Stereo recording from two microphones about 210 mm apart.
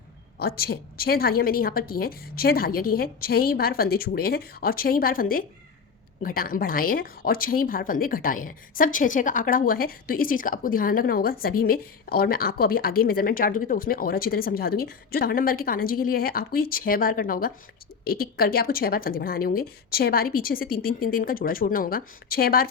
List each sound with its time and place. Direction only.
0.3 s speech: 45° left (ahead or behind)